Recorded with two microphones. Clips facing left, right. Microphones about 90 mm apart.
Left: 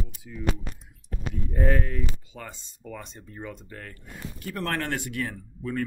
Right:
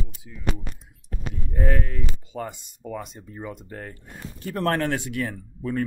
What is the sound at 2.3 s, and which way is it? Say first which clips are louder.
Speech: right 9 dB; 30° right (ahead or behind).